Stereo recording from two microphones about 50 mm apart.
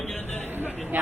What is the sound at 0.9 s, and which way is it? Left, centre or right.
Speech, right.